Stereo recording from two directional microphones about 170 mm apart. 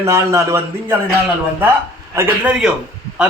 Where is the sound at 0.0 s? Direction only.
15° right (ahead or behind).